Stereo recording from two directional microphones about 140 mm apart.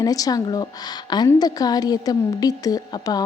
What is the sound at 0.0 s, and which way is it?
A woman's voice, 25° left (ahead or behind).